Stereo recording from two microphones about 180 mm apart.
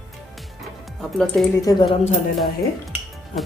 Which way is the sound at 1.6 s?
25° left (ahead or behind).